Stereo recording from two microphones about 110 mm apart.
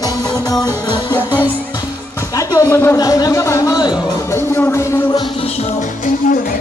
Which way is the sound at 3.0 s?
35° left (ahead or behind).